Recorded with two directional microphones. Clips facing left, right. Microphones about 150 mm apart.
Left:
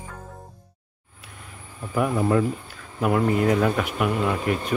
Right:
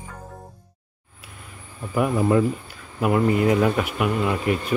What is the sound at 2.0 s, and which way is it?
Speech, 10° right (ahead or behind).